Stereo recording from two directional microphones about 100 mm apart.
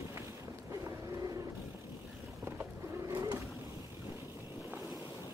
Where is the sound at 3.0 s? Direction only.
35° right (ahead or behind).